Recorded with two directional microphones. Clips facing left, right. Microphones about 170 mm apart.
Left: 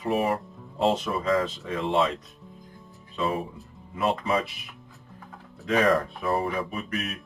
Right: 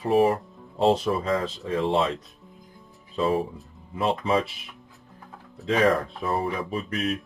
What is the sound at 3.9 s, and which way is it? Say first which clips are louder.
Speech: right 2 dB; 30° right (ahead or behind).